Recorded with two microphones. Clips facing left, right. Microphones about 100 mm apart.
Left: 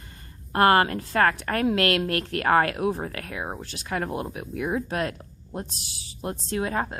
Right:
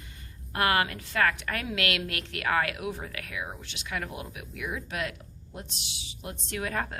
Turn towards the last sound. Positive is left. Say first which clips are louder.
# left 5 dB
turn(degrees=25)  # may be behind; listen again after turning